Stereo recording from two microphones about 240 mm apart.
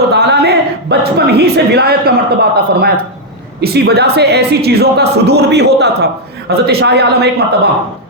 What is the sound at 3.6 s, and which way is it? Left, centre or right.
A man's voice, right.